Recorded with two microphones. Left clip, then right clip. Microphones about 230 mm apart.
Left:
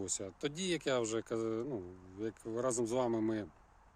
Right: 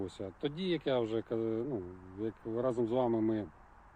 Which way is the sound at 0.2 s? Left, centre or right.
Centre.